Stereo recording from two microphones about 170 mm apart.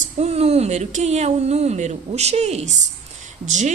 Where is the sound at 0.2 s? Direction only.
40° right (ahead or behind).